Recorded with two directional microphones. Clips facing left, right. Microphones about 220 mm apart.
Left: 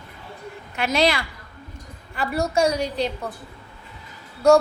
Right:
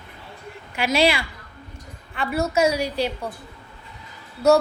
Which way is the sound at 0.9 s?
10° right (ahead or behind).